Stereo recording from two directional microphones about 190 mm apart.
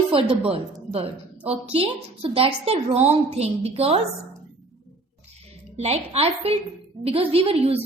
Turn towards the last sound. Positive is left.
turn(degrees=-30)  # may be behind; listen again after turning